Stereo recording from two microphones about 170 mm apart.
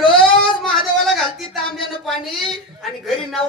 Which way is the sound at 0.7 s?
Centre (ahead or behind).